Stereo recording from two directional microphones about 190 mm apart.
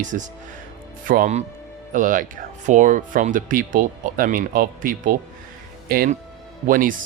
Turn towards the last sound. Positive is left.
turn(degrees=-45)  # may be behind; listen again after turning